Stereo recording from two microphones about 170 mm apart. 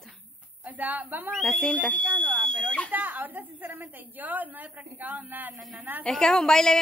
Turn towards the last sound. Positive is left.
turn(degrees=5)  # may be behind; listen again after turning